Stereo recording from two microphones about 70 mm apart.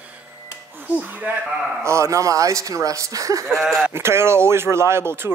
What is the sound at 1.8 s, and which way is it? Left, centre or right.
A man's voice, right.